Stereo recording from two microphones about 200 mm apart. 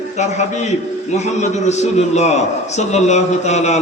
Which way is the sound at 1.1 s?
35° left (ahead or behind).